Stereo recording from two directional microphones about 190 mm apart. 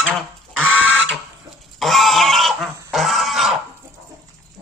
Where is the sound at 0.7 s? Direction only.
90° right.